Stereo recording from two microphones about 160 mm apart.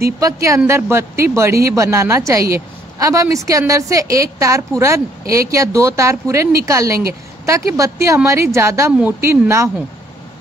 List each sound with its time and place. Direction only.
0.2 s a woman's voice: 20° right (ahead or behind)